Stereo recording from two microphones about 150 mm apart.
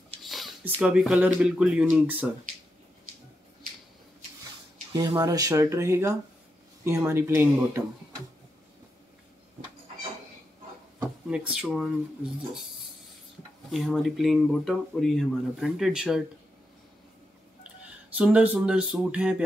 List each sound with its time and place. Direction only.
0.2 s a sound: centre (ahead or behind)
0.7 s speech: 5° right (ahead or behind)
4.9 s speech: 25° right (ahead or behind)
11.0 s speech: 5° right (ahead or behind)
13.7 s speech: centre (ahead or behind)
17.6 s speech: 10° right (ahead or behind)